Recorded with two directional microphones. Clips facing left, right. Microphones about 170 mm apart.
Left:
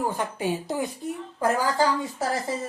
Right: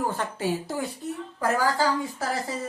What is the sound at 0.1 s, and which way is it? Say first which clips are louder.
A woman's voice: even; 15° left (ahead or behind).